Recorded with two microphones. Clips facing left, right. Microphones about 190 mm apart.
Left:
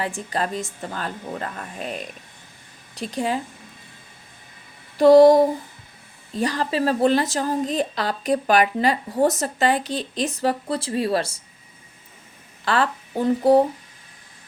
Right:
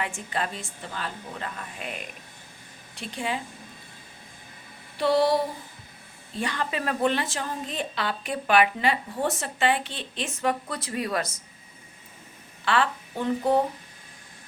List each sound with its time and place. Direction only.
0.0 s a woman's voice: 35° left (ahead or behind)
4.9 s a sound: 45° left (ahead or behind)
6.3 s a woman's voice: 35° left (ahead or behind)
12.6 s speech: 40° left (ahead or behind)